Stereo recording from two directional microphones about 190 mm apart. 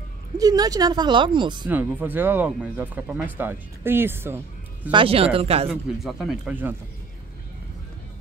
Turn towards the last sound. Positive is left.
turn(degrees=-10)  # may be behind; listen again after turning